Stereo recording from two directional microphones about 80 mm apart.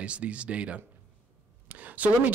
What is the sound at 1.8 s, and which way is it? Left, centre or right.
Speech, centre.